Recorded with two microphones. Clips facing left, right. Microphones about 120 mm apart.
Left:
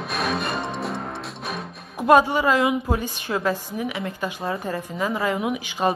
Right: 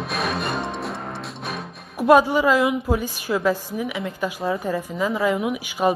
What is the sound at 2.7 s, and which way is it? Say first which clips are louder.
A woman's voice: right 1 dB; centre (ahead or behind).